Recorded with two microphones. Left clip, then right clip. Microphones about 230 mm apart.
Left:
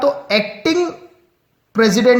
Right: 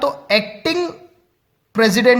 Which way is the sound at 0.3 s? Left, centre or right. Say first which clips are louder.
Left 1 dB; right.